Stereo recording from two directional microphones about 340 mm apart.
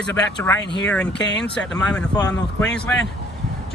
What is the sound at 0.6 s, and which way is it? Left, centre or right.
Speech, left.